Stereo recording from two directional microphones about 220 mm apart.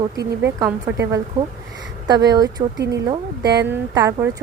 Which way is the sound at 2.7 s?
50° right (ahead or behind).